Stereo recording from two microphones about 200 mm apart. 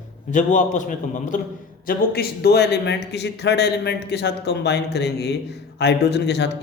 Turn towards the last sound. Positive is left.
turn(degrees=60)  # may be behind; listen again after turning